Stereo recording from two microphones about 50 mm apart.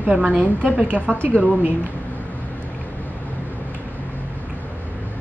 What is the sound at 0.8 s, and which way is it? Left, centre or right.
Speech, right.